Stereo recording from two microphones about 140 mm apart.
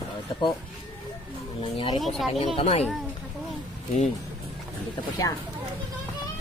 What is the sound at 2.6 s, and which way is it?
Speech, 45° left (ahead or behind).